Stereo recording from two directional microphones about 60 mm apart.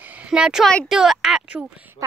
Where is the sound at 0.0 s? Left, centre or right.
Right.